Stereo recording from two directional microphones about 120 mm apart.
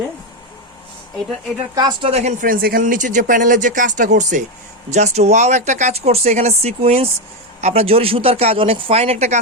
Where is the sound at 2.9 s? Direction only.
90° right.